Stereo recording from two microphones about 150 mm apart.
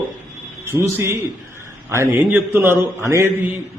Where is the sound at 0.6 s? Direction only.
15° right (ahead or behind).